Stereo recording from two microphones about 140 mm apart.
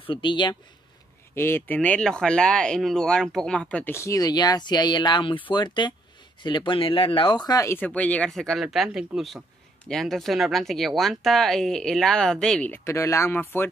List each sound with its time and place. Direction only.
0.0 s speech: 35° left (ahead or behind)
1.3 s speech: 15° left (ahead or behind)